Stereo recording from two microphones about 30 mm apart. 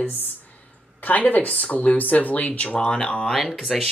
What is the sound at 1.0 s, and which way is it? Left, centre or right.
Speech, left.